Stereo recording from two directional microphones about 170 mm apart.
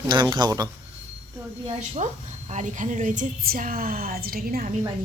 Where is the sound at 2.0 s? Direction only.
45° right (ahead or behind); by 4.7 s 60° right (ahead or behind).